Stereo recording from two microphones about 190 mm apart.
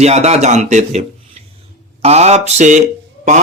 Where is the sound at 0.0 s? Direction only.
35° right (ahead or behind).